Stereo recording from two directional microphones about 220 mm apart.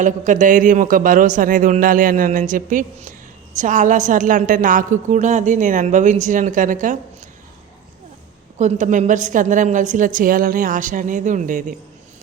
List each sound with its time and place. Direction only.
0.0 s a woman's voice: 35° right (ahead or behind)
8.5 s a woman's voice: 35° right (ahead or behind)